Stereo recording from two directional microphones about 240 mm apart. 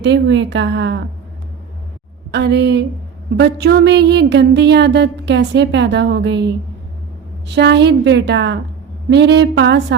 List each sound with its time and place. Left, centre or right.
0.0 s a woman's voice: right
2.3 s a woman's voice: right
7.4 s a woman's voice: right